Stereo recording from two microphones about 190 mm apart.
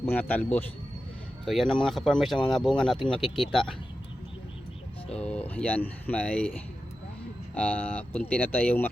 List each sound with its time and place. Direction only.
0.0 s speech: 10° left (ahead or behind)
5.2 s speech: 5° left (ahead or behind)
7.5 s speech: 5° left (ahead or behind)